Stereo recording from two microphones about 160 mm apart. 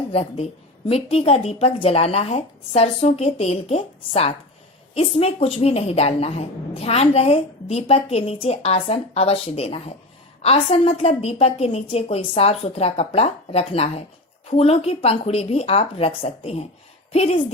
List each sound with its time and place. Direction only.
0.1 s a woman's voice: 40° left (ahead or behind)